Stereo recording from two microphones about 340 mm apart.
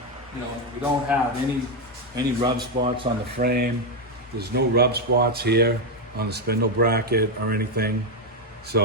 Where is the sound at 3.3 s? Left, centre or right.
Right.